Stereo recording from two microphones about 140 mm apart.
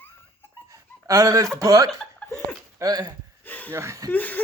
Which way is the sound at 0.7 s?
25° right (ahead or behind).